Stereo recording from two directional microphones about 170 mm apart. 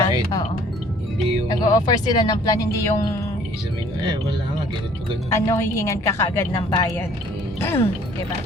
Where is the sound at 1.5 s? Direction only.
20° left (ahead or behind).